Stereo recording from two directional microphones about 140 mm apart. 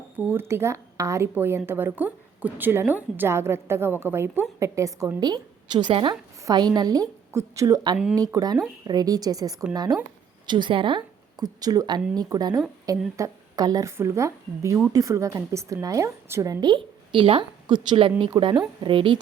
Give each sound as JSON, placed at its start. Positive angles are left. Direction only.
{"t": 0.3, "sound": "a woman's voice", "side_deg": -15}